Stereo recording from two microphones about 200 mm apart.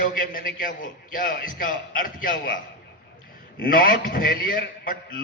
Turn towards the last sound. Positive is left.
turn(degrees=45)  # may be behind; listen again after turning